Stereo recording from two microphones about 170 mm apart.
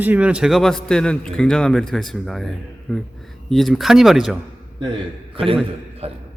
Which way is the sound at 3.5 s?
Centre (ahead or behind).